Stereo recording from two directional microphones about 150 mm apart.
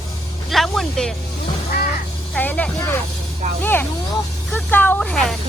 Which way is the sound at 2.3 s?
10° left (ahead or behind).